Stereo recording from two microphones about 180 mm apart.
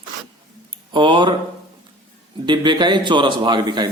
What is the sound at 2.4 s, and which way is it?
Speech, 25° right (ahead or behind).